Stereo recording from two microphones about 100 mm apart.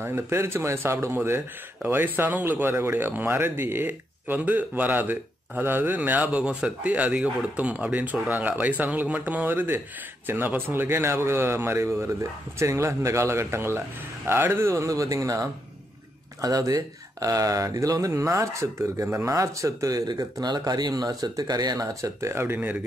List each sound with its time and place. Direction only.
0.0 s speech: 25° right (ahead or behind)